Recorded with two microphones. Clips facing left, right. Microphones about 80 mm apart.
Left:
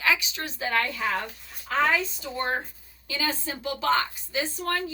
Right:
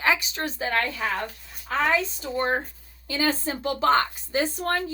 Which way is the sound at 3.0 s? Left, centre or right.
Right.